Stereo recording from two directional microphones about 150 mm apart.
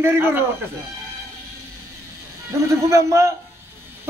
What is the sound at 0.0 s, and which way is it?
Speech, 15° right (ahead or behind).